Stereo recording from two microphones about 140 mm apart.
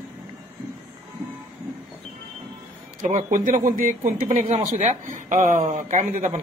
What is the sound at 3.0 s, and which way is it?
Speech, 65° right (ahead or behind).